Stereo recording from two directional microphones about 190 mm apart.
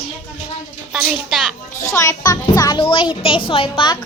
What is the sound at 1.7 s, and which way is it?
A child's voice, 15° left (ahead or behind).